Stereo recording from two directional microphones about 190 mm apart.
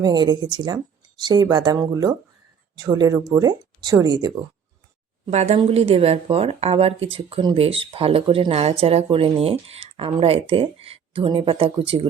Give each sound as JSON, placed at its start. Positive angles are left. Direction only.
{"t": 0.0, "sound": "speech", "side_deg": -20}
{"t": 5.2, "sound": "speech", "side_deg": -35}